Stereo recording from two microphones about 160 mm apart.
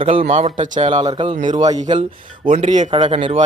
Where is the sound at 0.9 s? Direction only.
30° right (ahead or behind).